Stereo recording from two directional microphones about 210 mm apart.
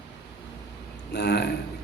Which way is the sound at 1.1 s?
50° left (ahead or behind).